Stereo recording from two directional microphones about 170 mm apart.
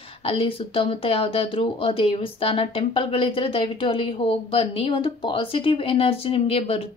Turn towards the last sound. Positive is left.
turn(degrees=35)  # may be behind; listen again after turning